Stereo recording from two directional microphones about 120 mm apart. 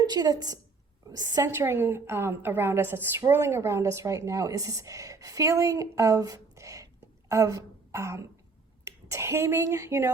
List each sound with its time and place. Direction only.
0.0 s a woman's voice: 35° right (ahead or behind)
7.0 s throat clearing: 25° right (ahead or behind)
8.8 s speech: 25° right (ahead or behind)